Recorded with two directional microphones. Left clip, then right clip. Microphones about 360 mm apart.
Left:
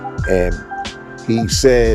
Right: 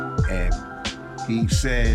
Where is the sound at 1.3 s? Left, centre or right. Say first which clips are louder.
Left 13 dB; centre.